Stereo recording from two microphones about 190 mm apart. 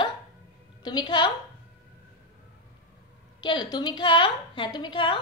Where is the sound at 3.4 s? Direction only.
25° left (ahead or behind).